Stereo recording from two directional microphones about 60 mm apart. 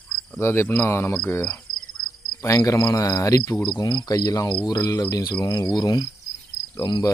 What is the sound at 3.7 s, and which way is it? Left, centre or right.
Cricket, left.